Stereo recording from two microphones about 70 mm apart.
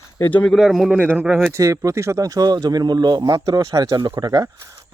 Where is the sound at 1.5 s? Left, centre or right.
Right.